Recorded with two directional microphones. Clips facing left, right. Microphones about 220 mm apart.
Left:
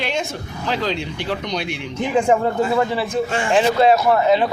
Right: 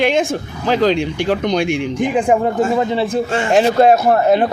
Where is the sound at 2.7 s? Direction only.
25° right (ahead or behind).